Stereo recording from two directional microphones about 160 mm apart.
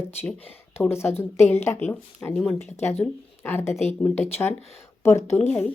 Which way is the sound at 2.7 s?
45° left (ahead or behind).